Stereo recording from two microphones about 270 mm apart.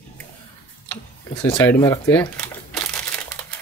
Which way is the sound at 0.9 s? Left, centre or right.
Centre.